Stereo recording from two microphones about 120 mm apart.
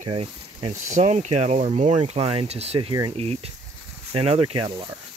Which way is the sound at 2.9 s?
40° right (ahead or behind).